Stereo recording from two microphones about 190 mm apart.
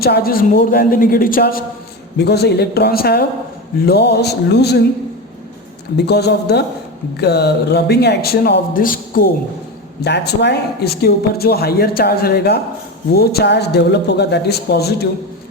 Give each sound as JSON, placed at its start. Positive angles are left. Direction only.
{"t": 0.0, "sound": "speech", "side_deg": 50}
{"t": 6.1, "sound": "speech", "side_deg": 60}
{"t": 10.0, "sound": "speech", "side_deg": 60}